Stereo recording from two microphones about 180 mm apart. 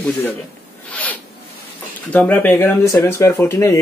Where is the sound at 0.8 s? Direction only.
10° left (ahead or behind).